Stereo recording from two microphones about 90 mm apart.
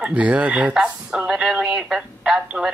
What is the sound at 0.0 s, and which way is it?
Speech, 15° right (ahead or behind).